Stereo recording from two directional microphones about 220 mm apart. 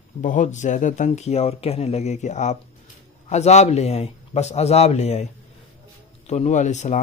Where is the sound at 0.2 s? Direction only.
35° left (ahead or behind).